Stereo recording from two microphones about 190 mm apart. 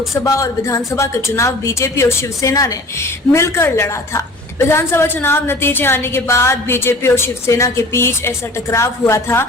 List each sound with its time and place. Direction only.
0.1 s a woman's voice: 15° left (ahead or behind)